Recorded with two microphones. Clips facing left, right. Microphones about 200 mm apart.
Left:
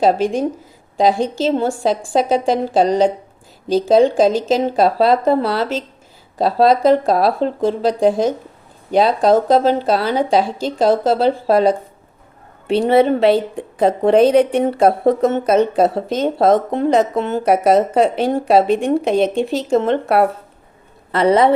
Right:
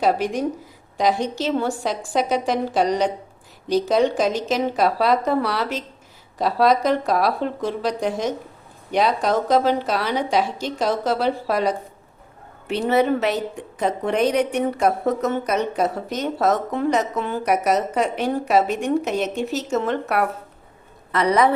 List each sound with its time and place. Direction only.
0.0 s a woman's voice: 25° left (ahead or behind)